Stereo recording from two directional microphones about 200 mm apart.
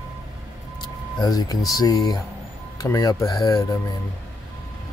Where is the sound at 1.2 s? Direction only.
20° left (ahead or behind).